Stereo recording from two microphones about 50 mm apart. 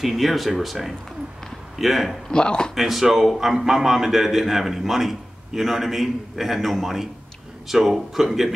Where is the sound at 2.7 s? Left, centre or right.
Centre.